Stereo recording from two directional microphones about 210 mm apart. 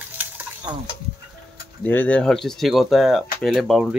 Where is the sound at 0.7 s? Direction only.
20° right (ahead or behind).